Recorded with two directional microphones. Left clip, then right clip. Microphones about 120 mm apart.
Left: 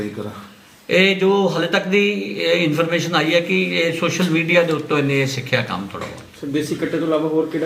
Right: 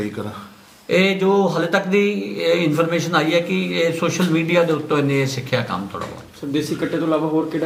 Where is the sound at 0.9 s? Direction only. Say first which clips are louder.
Left 2 dB; 5° right (ahead or behind).